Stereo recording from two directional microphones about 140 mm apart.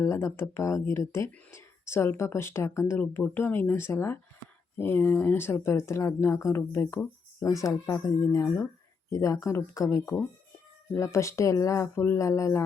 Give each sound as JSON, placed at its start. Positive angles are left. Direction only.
{"t": 0.0, "sound": "speech", "side_deg": 20}